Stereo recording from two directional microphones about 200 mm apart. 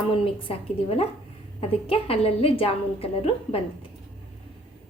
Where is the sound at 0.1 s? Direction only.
25° left (ahead or behind).